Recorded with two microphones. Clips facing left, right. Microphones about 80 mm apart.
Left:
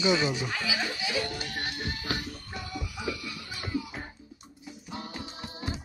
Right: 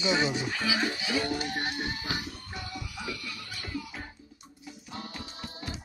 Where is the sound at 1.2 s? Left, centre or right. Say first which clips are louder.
Right 4 dB; right.